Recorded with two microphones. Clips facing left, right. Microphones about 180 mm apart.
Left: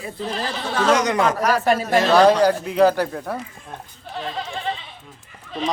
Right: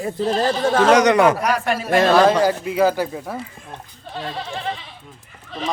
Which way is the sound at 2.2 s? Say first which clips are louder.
Left 1 dB; 5° right (ahead or behind).